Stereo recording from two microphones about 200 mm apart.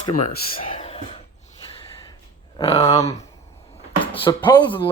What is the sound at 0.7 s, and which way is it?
Cough, 35° left (ahead or behind).